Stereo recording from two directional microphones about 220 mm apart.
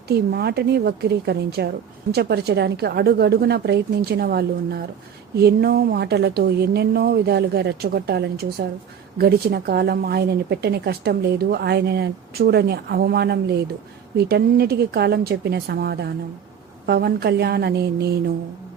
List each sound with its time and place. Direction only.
0.3 s speech: 45° right (ahead or behind)